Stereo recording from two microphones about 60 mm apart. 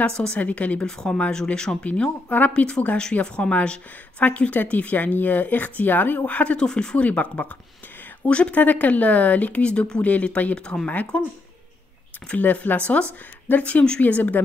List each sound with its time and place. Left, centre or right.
0.4 s speech: left
0.8 s speech: centre; by 2.5 s left
2.5 s speech: centre
7.1 s speech: left
12.3 s speech: left